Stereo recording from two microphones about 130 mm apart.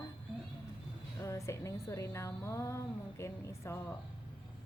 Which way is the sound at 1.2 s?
25° left (ahead or behind).